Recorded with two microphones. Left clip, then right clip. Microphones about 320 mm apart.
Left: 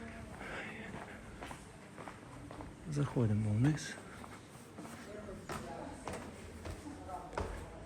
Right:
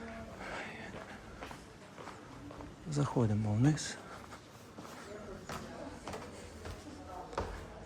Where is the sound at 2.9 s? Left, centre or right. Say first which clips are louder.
Right 3 dB; centre.